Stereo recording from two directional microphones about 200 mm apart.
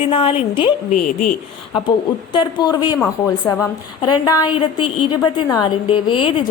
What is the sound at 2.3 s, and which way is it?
A woman's voice, 20° left (ahead or behind).